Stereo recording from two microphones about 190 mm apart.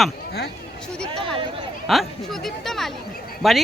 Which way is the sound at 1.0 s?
Centre (ahead or behind).